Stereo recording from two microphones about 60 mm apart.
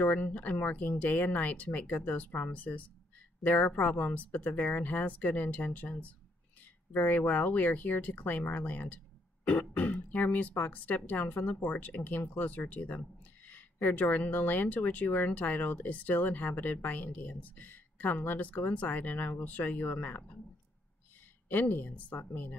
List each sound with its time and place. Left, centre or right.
0.0 s speech: left
21.5 s speech: left